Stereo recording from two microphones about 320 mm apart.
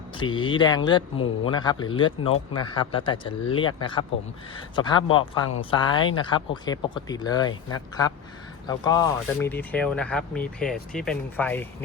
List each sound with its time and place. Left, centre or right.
0.2 s speech: centre